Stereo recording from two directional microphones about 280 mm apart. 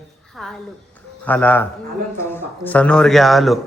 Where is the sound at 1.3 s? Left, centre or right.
Centre.